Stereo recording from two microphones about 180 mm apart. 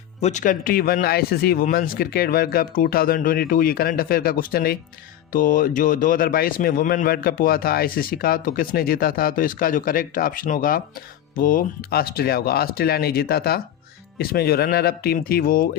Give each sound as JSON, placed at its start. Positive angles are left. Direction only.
{"t": 0.2, "sound": "speech", "side_deg": 40}